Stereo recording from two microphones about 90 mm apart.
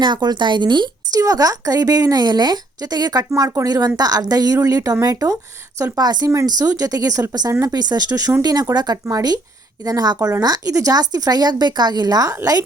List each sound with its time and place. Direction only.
0.0 s speech: 55° right (ahead or behind)